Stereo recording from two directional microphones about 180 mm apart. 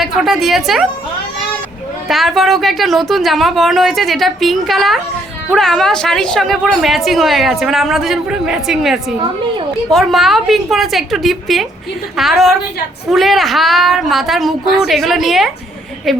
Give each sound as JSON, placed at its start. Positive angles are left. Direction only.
{"t": 0.0, "sound": "a woman's voice", "side_deg": 0}
{"t": 2.0, "sound": "a woman's voice", "side_deg": 0}